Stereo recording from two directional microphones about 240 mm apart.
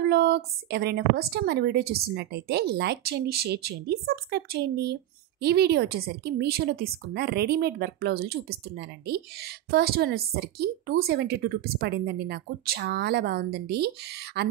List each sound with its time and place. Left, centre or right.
0.0 s a woman's voice: right